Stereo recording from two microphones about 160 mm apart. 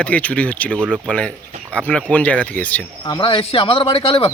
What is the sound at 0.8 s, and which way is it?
Speech, 10° right (ahead or behind).